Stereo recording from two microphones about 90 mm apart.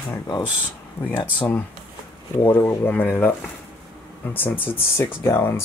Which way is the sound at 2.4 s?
25° left (ahead or behind).